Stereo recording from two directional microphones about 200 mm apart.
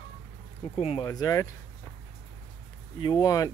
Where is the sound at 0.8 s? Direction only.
30° left (ahead or behind).